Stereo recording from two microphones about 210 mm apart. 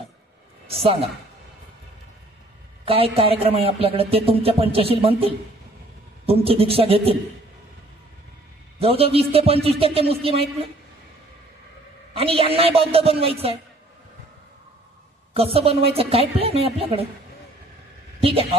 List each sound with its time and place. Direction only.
0.7 s a woman's voice: 25° right (ahead or behind)
2.8 s speech: 25° right (ahead or behind)
8.7 s speech: 25° right (ahead or behind)
12.1 s speech: 25° right (ahead or behind)
15.3 s speech: 25° right (ahead or behind)
18.2 s speech: 25° right (ahead or behind)